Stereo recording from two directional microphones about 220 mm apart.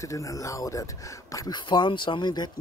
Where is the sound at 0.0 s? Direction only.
15° left (ahead or behind).